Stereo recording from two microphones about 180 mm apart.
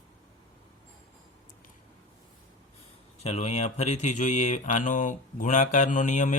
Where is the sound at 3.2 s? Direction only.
40° left (ahead or behind).